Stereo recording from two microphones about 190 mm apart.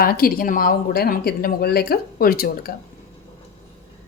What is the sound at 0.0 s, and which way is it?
A woman's voice, 50° left (ahead or behind).